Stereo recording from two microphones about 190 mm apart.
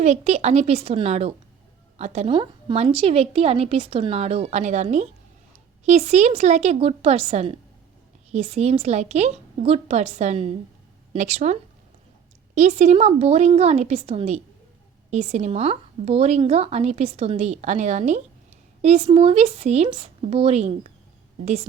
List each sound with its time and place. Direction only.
0.0 s a woman's voice: 35° right (ahead or behind)
12.5 s a woman's voice: 35° right (ahead or behind)